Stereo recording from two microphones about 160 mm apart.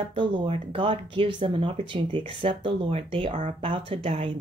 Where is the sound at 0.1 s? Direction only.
30° right (ahead or behind).